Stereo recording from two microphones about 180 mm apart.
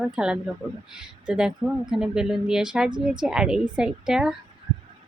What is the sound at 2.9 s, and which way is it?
Speech, 25° right (ahead or behind).